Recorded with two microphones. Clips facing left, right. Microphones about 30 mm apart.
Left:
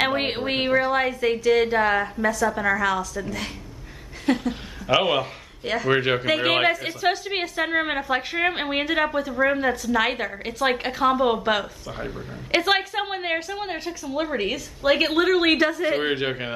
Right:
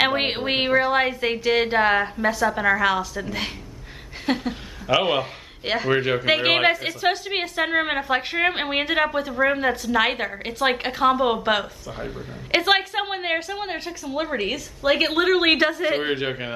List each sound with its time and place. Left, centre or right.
0.0 s a woman's voice: centre
5.9 s speech: centre
6.2 s a woman's voice: right
16.0 s a man's voice: centre